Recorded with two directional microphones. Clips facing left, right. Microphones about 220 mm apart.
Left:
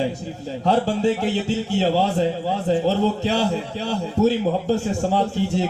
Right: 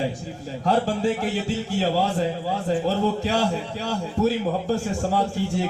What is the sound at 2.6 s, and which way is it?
Speech, 25° left (ahead or behind).